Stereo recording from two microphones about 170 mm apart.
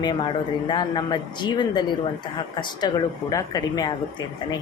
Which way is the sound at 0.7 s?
25° left (ahead or behind).